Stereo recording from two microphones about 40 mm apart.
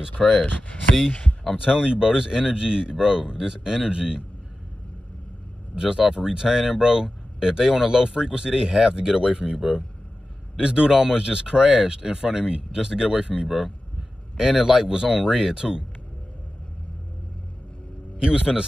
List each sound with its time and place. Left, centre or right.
0.2 s speech: centre
1.6 s speech: right
5.8 s speech: right
10.6 s speech: right
18.2 s speech: right